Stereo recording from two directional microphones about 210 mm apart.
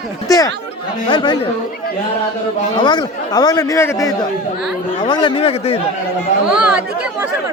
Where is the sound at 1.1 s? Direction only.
20° left (ahead or behind).